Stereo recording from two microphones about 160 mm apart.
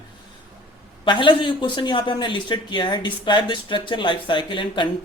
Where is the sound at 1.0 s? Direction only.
30° left (ahead or behind).